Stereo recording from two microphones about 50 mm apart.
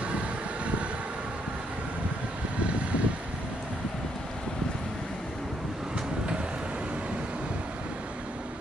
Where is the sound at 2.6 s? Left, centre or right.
Right.